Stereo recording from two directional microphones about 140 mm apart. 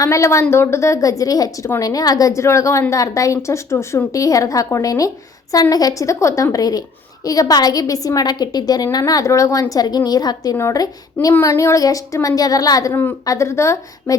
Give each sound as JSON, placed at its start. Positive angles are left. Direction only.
{"t": 0.0, "sound": "a woman's voice", "side_deg": 20}
{"t": 12.9, "sound": "a woman's voice", "side_deg": 15}